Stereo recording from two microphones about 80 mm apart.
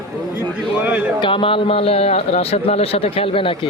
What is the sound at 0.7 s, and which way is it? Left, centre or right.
Speech, centre.